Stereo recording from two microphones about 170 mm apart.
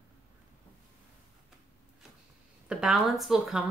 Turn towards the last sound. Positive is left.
turn(degrees=0)  # may be behind; listen again after turning